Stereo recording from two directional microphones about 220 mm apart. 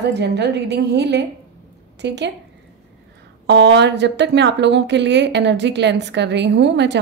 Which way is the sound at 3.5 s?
50° right (ahead or behind).